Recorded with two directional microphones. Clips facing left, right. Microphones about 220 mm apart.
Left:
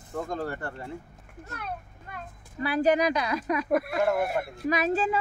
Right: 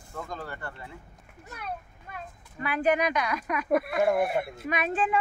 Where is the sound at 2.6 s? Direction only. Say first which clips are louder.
Left 2 dB; 35° left (ahead or behind).